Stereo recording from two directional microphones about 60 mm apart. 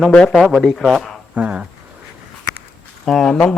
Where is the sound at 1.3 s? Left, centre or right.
Right.